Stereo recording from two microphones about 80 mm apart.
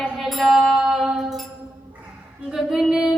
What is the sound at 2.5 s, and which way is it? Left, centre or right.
Female singing, centre.